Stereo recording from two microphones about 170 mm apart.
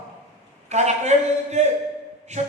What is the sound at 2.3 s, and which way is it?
A capella, 45° right (ahead or behind).